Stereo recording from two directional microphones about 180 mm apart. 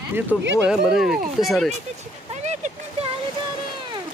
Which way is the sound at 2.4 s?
40° right (ahead or behind).